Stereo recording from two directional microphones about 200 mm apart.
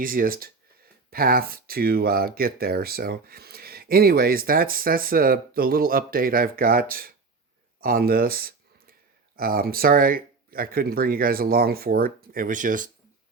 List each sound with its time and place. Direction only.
0.0 s speech: 45° right (ahead or behind)